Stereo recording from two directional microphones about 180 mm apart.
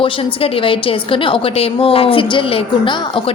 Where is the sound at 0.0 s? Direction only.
30° left (ahead or behind).